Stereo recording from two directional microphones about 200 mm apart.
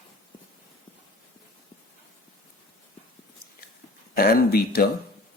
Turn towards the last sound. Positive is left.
turn(degrees=50)  # may be behind; listen again after turning